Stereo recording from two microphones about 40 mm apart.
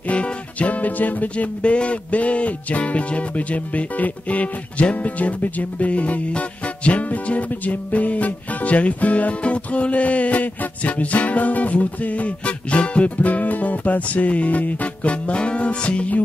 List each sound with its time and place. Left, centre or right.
0.0 s music: left
1.6 s music: left